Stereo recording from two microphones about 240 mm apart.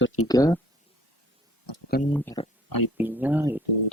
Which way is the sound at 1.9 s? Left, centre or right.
Left.